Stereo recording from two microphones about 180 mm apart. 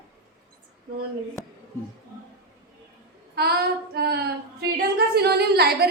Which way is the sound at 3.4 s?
60° right (ahead or behind).